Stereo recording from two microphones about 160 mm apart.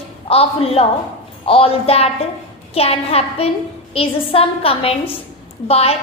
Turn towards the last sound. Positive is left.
turn(degrees=40)  # may be behind; listen again after turning